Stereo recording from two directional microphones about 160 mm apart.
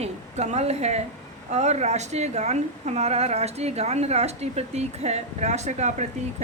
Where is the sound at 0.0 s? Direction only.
45° right (ahead or behind).